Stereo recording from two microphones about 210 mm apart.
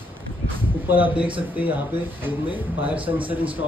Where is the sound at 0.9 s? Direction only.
10° right (ahead or behind).